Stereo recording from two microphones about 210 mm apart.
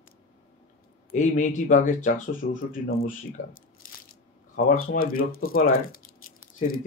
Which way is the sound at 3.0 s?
45° left (ahead or behind).